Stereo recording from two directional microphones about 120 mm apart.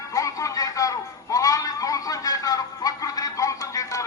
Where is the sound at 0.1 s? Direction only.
25° left (ahead or behind).